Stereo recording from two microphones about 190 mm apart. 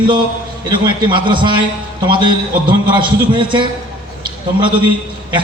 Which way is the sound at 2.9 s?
25° right (ahead or behind).